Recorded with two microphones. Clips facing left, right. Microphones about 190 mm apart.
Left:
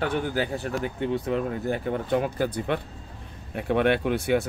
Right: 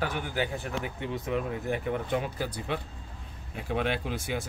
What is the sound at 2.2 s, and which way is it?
Speech, 55° left (ahead or behind).